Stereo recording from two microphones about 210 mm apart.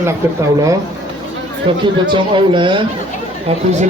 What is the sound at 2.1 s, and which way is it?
Speech, 25° right (ahead or behind).